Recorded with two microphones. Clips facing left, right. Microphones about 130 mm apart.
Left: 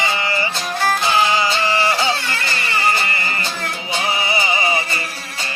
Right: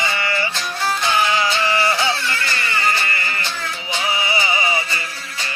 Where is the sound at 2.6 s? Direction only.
35° left (ahead or behind).